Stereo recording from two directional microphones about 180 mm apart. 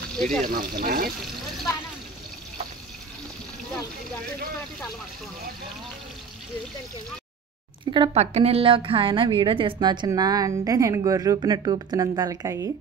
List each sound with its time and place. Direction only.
0.5 s speech: 55° right (ahead or behind)
7.8 s a woman's voice: 30° right (ahead or behind)